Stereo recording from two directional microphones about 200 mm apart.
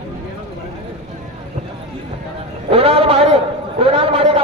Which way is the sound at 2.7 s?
30° right (ahead or behind).